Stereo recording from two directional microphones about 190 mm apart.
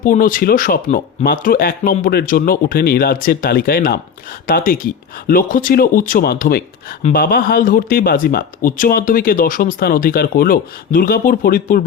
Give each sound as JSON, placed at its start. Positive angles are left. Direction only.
{"t": 0.0, "sound": "speech", "side_deg": 45}